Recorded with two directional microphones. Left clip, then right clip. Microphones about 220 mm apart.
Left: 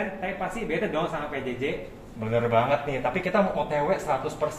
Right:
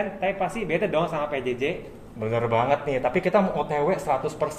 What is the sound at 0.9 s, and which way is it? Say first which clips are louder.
A man's voice: right 4 dB; 50° right (ahead or behind).